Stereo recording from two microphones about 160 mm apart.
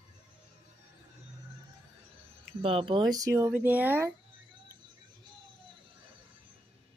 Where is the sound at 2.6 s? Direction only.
35° right (ahead or behind); by 4.1 s 10° right (ahead or behind).